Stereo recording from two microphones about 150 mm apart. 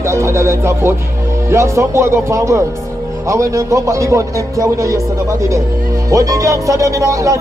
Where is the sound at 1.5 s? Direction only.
20° right (ahead or behind).